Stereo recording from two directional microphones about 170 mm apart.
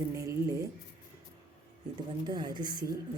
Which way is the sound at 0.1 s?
20° right (ahead or behind).